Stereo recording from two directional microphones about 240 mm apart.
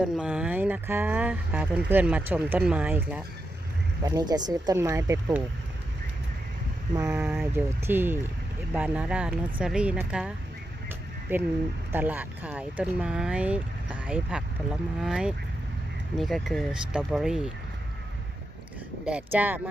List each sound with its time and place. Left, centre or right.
0.0 s speech: centre
4.0 s speech: centre
6.9 s speech: centre
10.8 s a sound: centre
11.9 s speech: centre
19.0 s speech: centre